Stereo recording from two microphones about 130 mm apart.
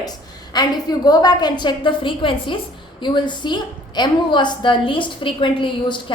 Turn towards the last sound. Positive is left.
turn(degrees=40)  # may be behind; listen again after turning